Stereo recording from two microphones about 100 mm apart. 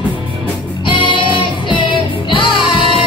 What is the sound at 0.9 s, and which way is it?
Music, 55° left (ahead or behind).